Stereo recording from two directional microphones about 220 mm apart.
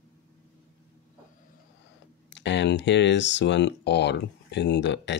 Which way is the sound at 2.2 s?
55° left (ahead or behind).